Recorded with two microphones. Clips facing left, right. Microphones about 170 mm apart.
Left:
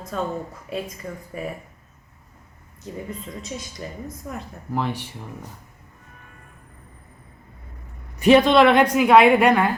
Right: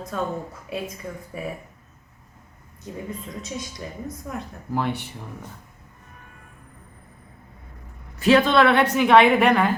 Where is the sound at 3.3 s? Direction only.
Centre (ahead or behind).